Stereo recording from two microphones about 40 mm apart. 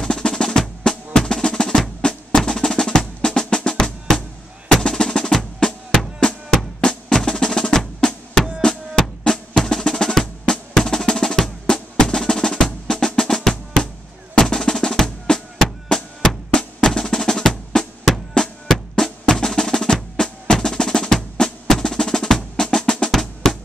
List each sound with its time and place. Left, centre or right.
0.0 s percussion: centre
2.0 s music: left
4.9 s percussion: centre
6.9 s music: centre
8.5 s percussion: centre
11.2 s music: centre
12.3 s percussion: centre
13.2 s drum: centre
16.5 s music: centre
19.3 s percussion: centre
23.1 s drum: centre